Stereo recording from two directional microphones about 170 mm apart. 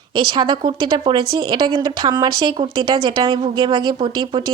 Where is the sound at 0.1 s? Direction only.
25° right (ahead or behind).